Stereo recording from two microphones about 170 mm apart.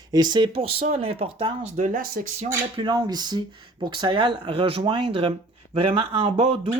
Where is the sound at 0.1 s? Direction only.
25° right (ahead or behind).